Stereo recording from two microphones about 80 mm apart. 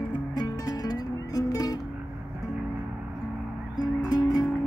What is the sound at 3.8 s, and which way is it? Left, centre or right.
Music, left.